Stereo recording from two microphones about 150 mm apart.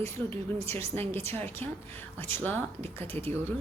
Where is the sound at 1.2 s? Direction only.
15° left (ahead or behind).